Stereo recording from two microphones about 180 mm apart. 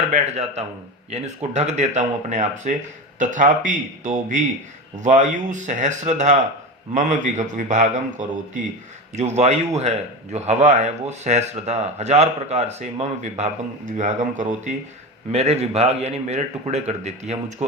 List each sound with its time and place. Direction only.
0.1 s speech: 40° right (ahead or behind)
9.1 s speech: 40° right (ahead or behind)